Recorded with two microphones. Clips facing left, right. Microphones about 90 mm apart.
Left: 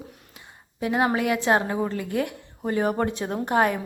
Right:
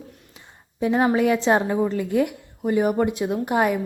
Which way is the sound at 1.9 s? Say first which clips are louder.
Right 5 dB; 20° right (ahead or behind).